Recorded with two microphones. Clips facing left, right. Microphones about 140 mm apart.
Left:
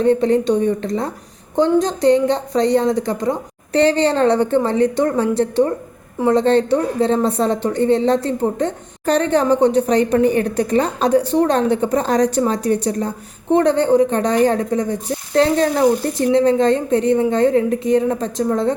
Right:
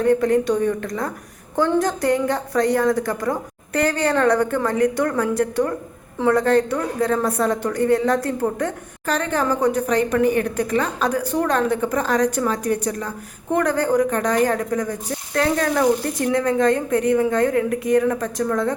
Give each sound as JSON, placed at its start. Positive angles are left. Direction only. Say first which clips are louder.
{"t": 0.0, "sound": "a woman's voice", "louder": "left 2 dB", "side_deg": 25}